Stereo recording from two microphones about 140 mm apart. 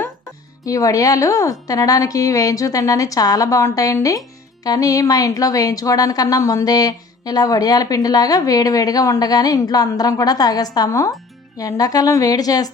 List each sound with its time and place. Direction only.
0.6 s a woman's voice: 25° left (ahead or behind)